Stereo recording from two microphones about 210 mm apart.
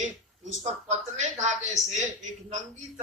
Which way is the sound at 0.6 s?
35° right (ahead or behind).